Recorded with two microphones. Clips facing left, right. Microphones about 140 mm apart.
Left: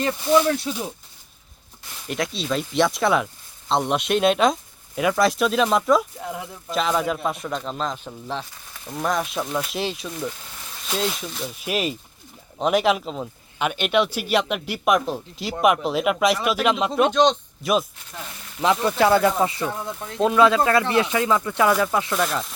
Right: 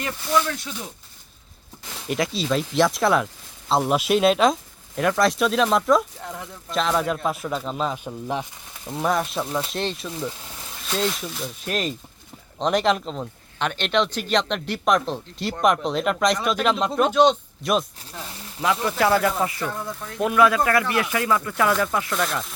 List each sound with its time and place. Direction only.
0.0 s speech: 30° left (ahead or behind)
2.0 s speech: centre (ahead or behind)
18.6 s speech: 25° left (ahead or behind)
22.1 s speech: 5° left (ahead or behind)